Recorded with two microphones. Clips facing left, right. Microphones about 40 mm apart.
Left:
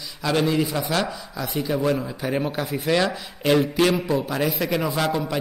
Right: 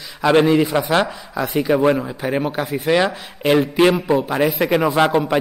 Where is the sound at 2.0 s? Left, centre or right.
Right.